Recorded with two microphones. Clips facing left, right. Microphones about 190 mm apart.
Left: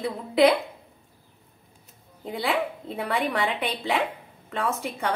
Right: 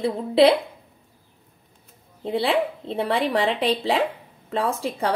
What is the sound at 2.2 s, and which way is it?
Speech, 30° right (ahead or behind).